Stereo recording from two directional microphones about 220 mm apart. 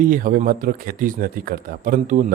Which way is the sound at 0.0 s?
40° right (ahead or behind).